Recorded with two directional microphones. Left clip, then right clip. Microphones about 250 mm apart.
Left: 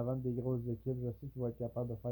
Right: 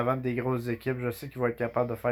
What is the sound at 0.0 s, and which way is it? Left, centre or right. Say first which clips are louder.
Speech: right 10 dB; right.